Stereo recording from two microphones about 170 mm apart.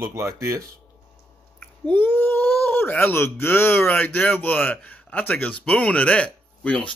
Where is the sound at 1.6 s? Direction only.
10° left (ahead or behind).